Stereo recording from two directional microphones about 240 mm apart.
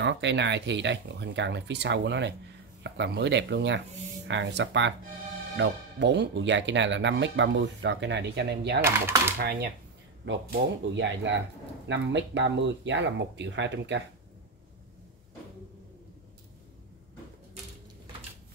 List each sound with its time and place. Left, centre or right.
0.0 s speech: right
8.8 s speech: centre
9.4 s speech: right